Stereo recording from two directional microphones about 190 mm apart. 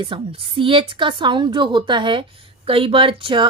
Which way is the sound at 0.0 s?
25° right (ahead or behind).